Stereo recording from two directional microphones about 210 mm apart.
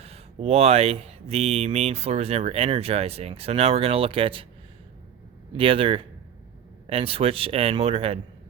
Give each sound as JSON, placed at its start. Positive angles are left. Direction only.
{"t": 0.0, "sound": "speech", "side_deg": -30}
{"t": 5.5, "sound": "speech", "side_deg": -25}